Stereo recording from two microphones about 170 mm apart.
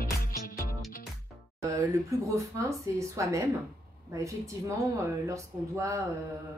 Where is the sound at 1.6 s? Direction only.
20° right (ahead or behind).